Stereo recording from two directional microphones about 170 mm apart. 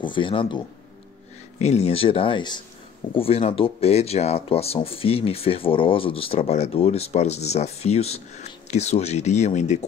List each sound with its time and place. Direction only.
0.0 s speech: 30° left (ahead or behind)
1.6 s speech: 40° left (ahead or behind)